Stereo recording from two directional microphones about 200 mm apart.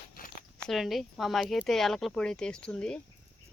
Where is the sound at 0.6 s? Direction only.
Centre (ahead or behind).